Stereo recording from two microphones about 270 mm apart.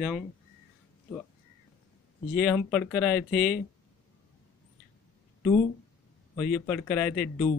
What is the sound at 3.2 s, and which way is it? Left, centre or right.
Speech, left.